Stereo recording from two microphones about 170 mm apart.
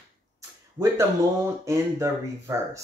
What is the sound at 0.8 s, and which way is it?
Speech, 15° right (ahead or behind).